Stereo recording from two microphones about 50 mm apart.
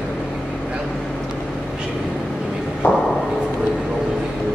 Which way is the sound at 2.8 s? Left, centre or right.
Left.